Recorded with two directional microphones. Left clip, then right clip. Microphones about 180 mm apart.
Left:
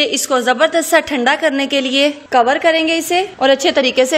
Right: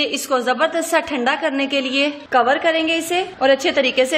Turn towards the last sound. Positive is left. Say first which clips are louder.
# left 4 dB
turn(degrees=40)  # may be behind; listen again after turning